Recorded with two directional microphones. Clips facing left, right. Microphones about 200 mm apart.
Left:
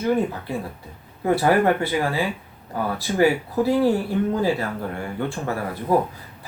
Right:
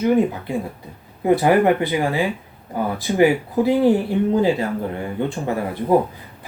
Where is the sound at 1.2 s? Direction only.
15° right (ahead or behind).